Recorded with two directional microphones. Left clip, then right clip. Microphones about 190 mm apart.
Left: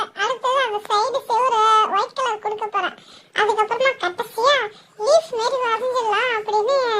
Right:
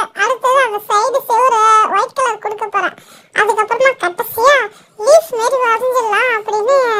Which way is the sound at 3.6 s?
50° right (ahead or behind).